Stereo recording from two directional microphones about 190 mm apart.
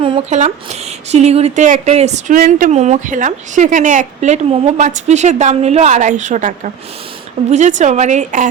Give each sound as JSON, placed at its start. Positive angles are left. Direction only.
{"t": 0.0, "sound": "a sound", "side_deg": -25}
{"t": 0.3, "sound": "speech", "side_deg": -35}
{"t": 7.5, "sound": "speech", "side_deg": -40}